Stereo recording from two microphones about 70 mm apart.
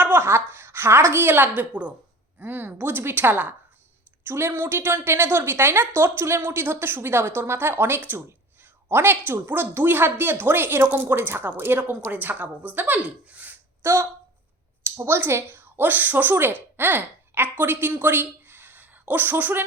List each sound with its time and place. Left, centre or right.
0.0 s a sound: right
2.4 s a woman's voice: right
13.8 s a woman's voice: right